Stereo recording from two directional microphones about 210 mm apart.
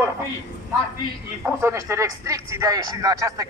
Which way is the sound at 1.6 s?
15° right (ahead or behind).